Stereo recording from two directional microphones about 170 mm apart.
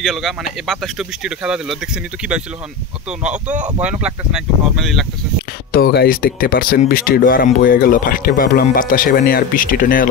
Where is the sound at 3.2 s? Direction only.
5° right (ahead or behind).